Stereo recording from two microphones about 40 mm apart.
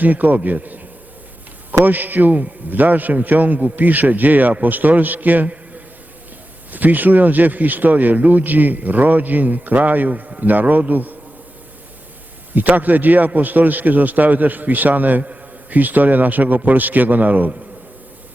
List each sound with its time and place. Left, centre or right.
0.0 s speech: right
1.8 s a man's voice: right
12.5 s speech: right